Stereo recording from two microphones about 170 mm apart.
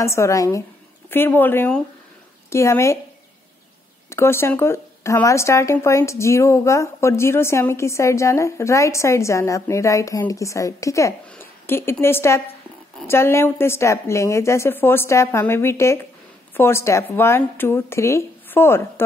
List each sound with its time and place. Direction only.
0.0 s speech: 15° left (ahead or behind)
4.1 s speech: 15° left (ahead or behind)